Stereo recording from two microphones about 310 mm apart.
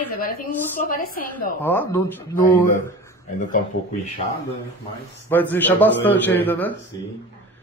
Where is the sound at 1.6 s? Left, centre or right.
Centre.